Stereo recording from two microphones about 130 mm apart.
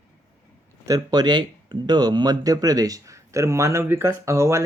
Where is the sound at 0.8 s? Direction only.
30° right (ahead or behind).